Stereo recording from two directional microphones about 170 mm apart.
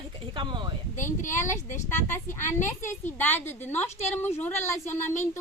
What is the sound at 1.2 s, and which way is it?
Speech, 50° left (ahead or behind).